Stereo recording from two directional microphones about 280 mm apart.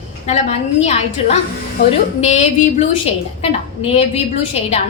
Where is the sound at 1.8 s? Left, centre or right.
Left.